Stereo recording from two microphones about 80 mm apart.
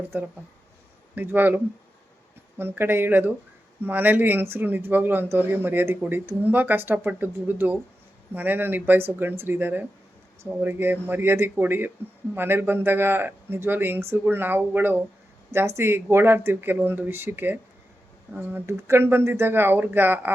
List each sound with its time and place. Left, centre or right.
1.1 s speech: right